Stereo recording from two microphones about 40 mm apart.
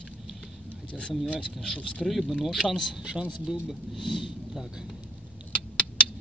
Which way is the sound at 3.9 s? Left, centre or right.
Centre.